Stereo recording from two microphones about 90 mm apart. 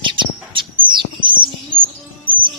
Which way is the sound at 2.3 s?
70° right (ahead or behind).